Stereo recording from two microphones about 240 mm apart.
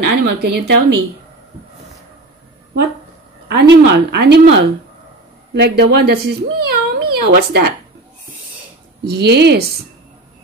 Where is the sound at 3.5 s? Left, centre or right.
Right.